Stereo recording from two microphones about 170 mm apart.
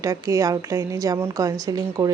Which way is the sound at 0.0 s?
20° right (ahead or behind).